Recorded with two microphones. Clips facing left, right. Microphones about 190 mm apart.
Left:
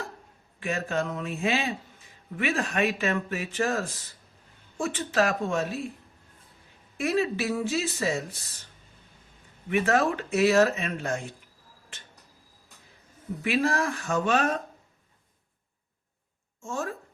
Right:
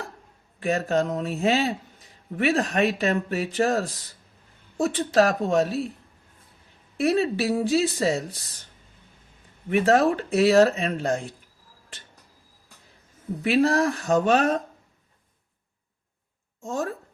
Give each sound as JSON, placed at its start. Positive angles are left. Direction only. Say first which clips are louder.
{"t": 0.6, "sound": "speech", "louder": "right 6 dB", "side_deg": -35}
{"t": 6.9, "sound": "speech", "louder": "right 4 dB", "side_deg": -35}
{"t": 9.6, "sound": "speech", "louder": "right 5 dB", "side_deg": -35}
{"t": 13.4, "sound": "speech", "louder": "right 5 dB", "side_deg": -35}
{"t": 16.6, "sound": "speech", "louder": "right 4 dB", "side_deg": -35}